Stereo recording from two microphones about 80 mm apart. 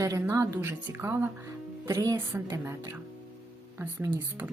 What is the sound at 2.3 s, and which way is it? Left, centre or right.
Speech, right.